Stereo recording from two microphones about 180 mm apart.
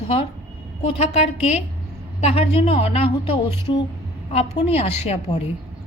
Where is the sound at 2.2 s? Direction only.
35° left (ahead or behind).